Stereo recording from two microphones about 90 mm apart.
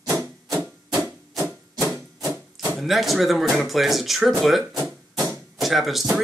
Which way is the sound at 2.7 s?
Centre (ahead or behind).